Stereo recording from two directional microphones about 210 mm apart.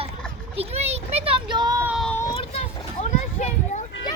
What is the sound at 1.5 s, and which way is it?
Child singing, 20° right (ahead or behind).